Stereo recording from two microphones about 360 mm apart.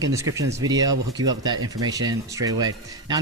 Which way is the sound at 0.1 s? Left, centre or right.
Centre.